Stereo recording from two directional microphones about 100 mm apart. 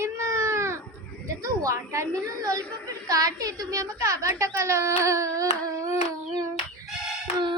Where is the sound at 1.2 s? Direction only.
35° right (ahead or behind).